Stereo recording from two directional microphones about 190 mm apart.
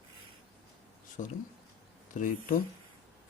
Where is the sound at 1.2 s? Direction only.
40° left (ahead or behind).